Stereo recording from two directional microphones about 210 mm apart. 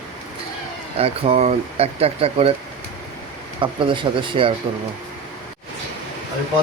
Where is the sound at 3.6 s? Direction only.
25° right (ahead or behind).